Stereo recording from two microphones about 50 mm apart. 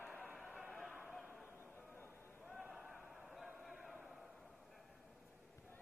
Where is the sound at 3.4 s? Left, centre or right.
Centre.